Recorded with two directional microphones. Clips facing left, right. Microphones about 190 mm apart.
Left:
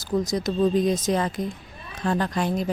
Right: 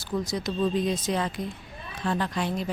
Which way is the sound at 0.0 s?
40° left (ahead or behind).